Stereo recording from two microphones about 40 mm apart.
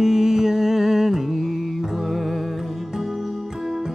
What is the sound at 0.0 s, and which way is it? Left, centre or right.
Music, centre.